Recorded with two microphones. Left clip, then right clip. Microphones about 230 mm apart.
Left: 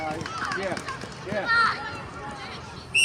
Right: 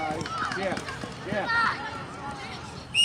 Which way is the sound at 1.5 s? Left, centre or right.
Left.